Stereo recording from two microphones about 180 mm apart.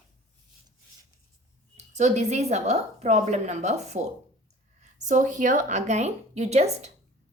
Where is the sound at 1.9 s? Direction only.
40° right (ahead or behind).